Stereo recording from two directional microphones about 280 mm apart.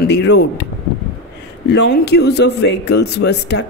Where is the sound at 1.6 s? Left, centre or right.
Left.